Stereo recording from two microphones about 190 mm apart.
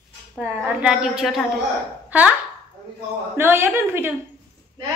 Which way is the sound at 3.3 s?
10° right (ahead or behind).